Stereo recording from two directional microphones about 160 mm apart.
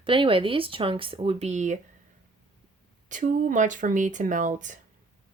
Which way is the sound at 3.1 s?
50° right (ahead or behind).